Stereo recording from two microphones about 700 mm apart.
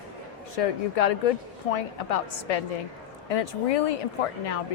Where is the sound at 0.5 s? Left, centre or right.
Left.